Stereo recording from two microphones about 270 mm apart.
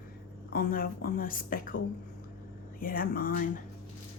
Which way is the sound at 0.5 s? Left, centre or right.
Left.